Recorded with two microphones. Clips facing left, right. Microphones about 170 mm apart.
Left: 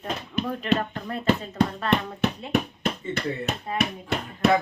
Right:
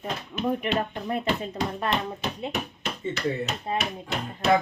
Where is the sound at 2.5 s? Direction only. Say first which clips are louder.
Left 6 dB; 55° left (ahead or behind).